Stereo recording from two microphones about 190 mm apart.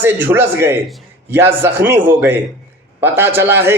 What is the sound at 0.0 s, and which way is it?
A man's voice, 10° right (ahead or behind).